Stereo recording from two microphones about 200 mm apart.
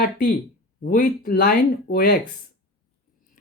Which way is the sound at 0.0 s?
45° left (ahead or behind).